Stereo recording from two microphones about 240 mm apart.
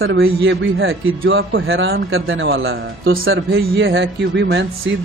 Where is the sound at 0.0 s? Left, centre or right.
Right.